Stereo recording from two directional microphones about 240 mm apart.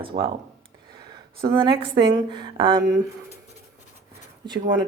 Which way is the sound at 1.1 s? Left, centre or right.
Centre.